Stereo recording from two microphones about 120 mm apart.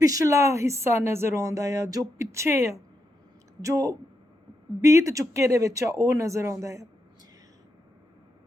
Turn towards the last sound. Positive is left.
turn(degrees=-25)  # may be behind; listen again after turning